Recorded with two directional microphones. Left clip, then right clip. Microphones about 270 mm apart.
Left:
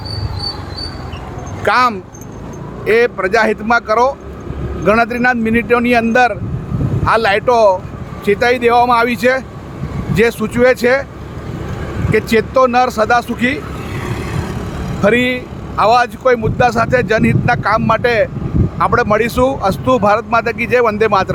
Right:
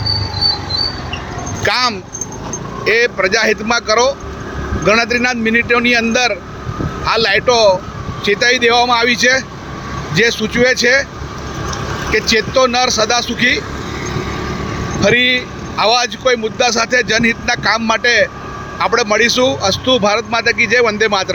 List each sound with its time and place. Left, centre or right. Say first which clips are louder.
1.6 s speech: left 3 dB; centre
12.1 s speech: left 1 dB; centre
15.0 s speech: right 1 dB; centre